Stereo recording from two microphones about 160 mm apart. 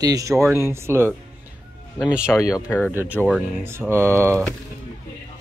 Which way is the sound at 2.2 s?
20° left (ahead or behind).